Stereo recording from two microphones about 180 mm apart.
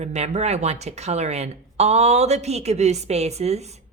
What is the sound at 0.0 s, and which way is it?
A woman's voice, 40° right (ahead or behind).